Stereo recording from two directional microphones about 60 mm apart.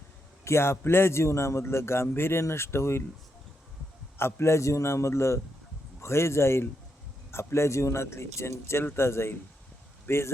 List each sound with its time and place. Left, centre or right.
0.4 s a man's voice: left
4.2 s a man's voice: left